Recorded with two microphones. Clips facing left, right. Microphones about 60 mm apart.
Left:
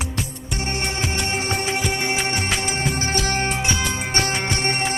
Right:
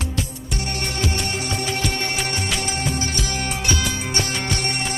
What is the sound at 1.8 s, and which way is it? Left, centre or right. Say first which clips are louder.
Music: left 2 dB; centre.